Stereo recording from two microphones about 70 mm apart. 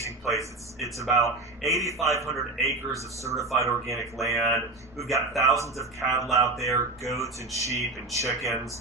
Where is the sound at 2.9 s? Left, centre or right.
Right.